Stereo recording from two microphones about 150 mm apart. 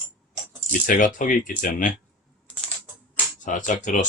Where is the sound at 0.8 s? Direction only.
60° left (ahead or behind).